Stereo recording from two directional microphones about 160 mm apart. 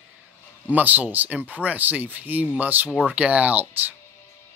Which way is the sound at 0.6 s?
10° right (ahead or behind).